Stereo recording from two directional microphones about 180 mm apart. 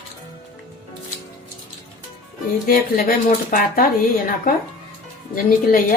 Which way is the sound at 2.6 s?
50° left (ahead or behind).